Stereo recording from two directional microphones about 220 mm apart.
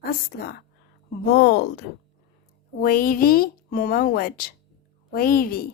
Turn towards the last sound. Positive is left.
turn(degrees=40)  # may be behind; listen again after turning